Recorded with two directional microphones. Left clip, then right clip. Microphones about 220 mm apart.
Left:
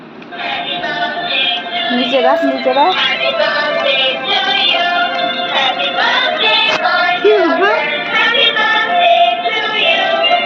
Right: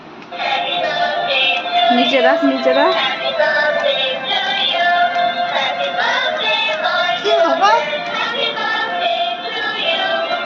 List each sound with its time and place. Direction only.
3.0 s music: 10° left (ahead or behind)
4.6 s synthetic singing: 5° left (ahead or behind)
5.5 s music: 5° left (ahead or behind)
9.8 s music: 20° left (ahead or behind)